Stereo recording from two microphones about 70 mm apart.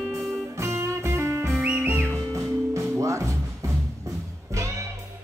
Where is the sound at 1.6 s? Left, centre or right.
Right.